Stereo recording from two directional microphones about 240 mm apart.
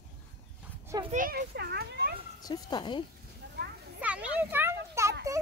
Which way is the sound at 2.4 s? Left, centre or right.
Centre.